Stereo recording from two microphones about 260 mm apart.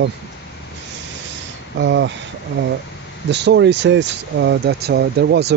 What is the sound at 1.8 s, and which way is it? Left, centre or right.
Speech, right.